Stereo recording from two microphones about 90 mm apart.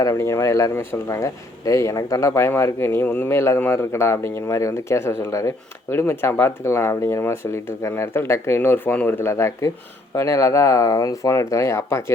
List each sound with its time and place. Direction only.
0.0 s speech: 30° left (ahead or behind)
3.0 s speech: 15° left (ahead or behind)